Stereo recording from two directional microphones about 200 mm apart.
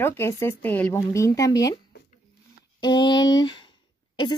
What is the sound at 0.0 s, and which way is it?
A woman's voice, 10° left (ahead or behind).